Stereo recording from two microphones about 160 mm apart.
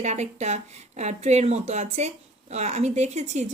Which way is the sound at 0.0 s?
45° right (ahead or behind).